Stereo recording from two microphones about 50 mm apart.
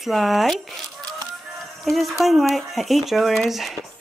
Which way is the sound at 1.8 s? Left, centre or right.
Centre.